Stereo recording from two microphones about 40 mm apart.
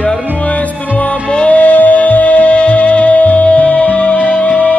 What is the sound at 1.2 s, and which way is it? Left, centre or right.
Music, left.